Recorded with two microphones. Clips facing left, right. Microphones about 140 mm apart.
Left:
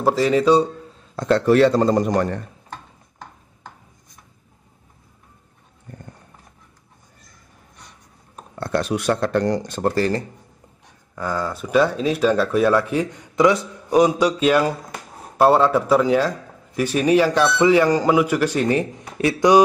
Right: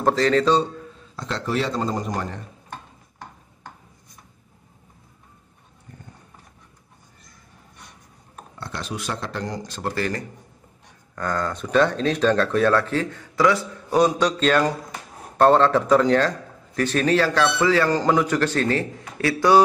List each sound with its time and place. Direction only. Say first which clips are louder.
0.0 s a man's voice: left 2 dB; 10° left (ahead or behind)
1.1 s a man's voice: left 10 dB; 55° left (ahead or behind)
5.9 s horse: left 5 dB; 55° left (ahead or behind)
8.5 s a man's voice: left 10 dB; 55° left (ahead or behind)
9.8 s speech: left 6 dB; 35° left (ahead or behind)
11.1 s a man's voice: left 1 dB; 10° left (ahead or behind)